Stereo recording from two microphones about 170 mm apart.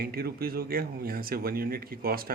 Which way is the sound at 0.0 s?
65° right (ahead or behind).